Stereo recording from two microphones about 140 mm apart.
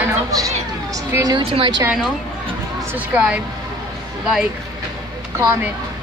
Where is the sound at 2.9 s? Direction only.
10° right (ahead or behind).